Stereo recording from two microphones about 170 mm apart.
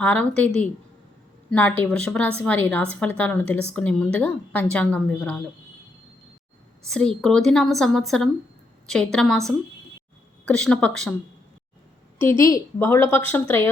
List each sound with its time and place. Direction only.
0.0 s a woman's voice: 5° left (ahead or behind)
6.8 s a woman's voice: 5° left (ahead or behind)
10.4 s a woman's voice: 5° left (ahead or behind)
12.2 s a woman's voice: 15° left (ahead or behind)